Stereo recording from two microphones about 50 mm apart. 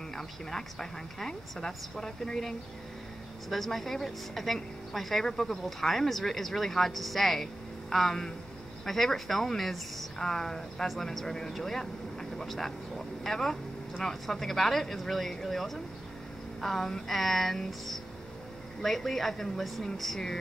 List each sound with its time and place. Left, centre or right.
0.1 s a woman's voice: centre